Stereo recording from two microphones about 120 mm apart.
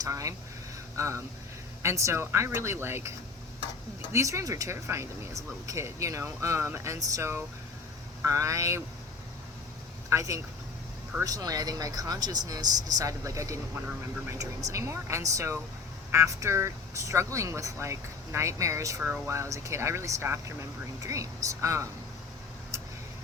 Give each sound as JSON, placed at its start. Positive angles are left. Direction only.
{"t": 0.0, "sound": "speech", "side_deg": -25}
{"t": 4.1, "sound": "speech", "side_deg": -25}
{"t": 10.1, "sound": "speech", "side_deg": -25}